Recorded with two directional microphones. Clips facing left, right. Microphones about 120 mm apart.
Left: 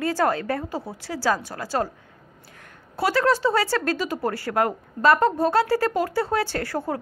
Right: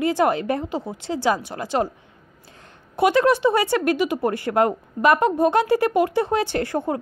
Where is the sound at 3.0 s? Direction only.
20° right (ahead or behind).